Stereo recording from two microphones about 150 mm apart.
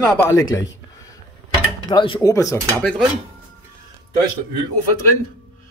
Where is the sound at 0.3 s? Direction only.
20° left (ahead or behind).